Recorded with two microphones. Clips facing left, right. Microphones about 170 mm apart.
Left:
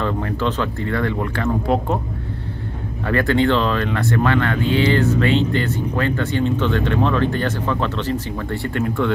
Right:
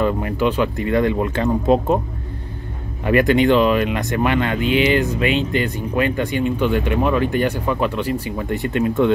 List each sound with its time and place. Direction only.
0.0 s speech: 15° right (ahead or behind)
3.1 s speech: 15° right (ahead or behind)